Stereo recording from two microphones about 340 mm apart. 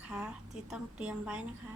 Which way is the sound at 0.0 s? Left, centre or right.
Centre.